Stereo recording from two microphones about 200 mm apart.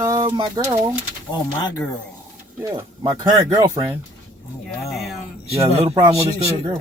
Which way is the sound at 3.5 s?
20° right (ahead or behind).